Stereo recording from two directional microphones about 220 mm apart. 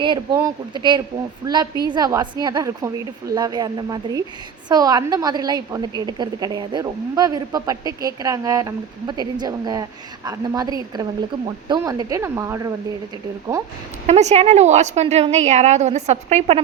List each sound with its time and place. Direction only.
0.0 s a woman's voice: 20° right (ahead or behind)
14.1 s a woman's voice: 30° right (ahead or behind)